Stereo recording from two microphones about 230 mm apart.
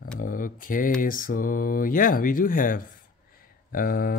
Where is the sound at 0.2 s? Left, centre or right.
Left.